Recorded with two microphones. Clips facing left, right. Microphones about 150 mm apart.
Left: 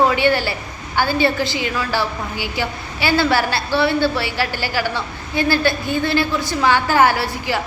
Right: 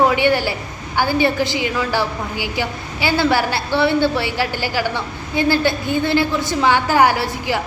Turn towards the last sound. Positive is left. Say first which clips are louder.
# right 1 dB
turn(degrees=-20)  # may be behind; listen again after turning